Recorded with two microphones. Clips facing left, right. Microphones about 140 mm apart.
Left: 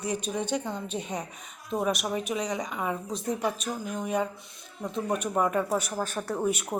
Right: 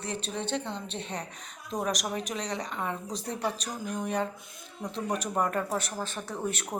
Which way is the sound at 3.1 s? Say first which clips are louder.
Left 5 dB; 35° right (ahead or behind).